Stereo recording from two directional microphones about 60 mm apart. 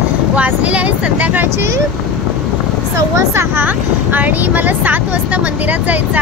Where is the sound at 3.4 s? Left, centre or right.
Right.